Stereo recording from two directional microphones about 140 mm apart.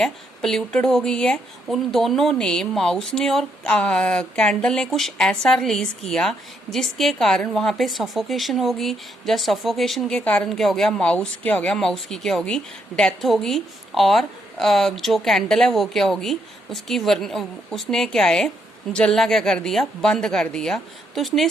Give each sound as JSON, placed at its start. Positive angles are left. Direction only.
{"t": 0.0, "sound": "a woman's voice", "side_deg": 5}